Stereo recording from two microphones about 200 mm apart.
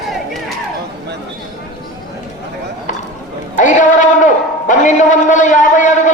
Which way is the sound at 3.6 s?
40° left (ahead or behind).